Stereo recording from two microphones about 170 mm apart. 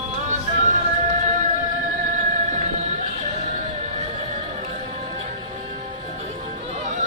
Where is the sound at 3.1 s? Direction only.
40° right (ahead or behind).